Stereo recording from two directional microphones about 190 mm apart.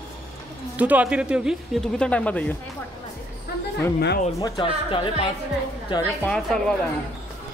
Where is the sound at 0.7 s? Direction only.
10° right (ahead or behind); by 2.6 s 10° left (ahead or behind).